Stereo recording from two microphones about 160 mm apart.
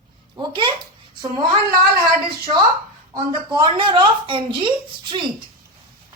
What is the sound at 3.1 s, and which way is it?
A woman's voice, 30° right (ahead or behind).